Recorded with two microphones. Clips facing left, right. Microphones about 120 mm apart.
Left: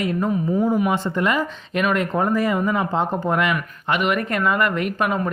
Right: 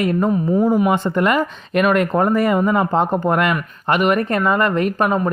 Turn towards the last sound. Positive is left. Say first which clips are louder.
# right 4 dB
turn(degrees=-35)  # may be behind; listen again after turning